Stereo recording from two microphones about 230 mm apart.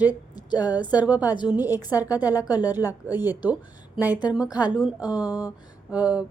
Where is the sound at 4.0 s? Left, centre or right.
Centre.